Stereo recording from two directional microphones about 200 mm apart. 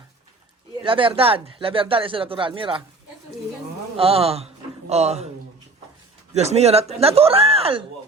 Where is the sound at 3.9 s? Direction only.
30° right (ahead or behind).